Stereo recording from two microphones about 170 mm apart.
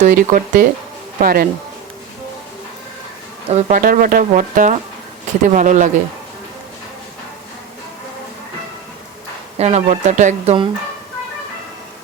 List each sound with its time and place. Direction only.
0.0 s speech: 45° right (ahead or behind)
3.5 s speech: 50° right (ahead or behind)
9.6 s speech: 40° right (ahead or behind)